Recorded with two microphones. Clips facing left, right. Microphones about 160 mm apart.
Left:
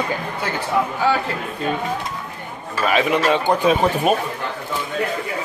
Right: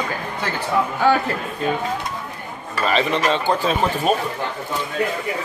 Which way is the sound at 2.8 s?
10° left (ahead or behind).